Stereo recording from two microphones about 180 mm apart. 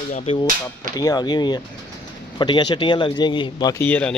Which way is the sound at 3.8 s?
10° left (ahead or behind).